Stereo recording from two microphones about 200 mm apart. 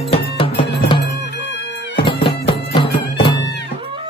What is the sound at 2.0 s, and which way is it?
Music, 25° left (ahead or behind).